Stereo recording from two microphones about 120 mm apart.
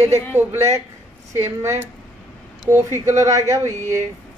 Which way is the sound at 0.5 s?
25° right (ahead or behind).